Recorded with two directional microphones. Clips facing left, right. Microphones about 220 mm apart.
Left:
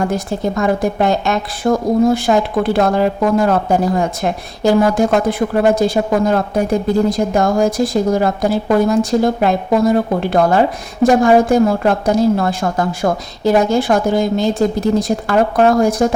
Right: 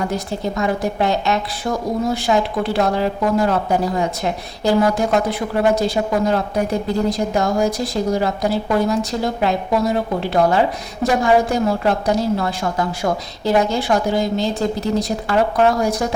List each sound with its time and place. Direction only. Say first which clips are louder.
0.1 s a woman's voice: left 4 dB; 50° left (ahead or behind)